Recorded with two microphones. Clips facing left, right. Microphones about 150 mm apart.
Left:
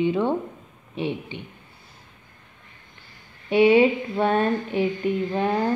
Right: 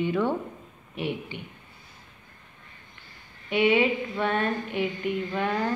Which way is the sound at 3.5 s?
35° left (ahead or behind).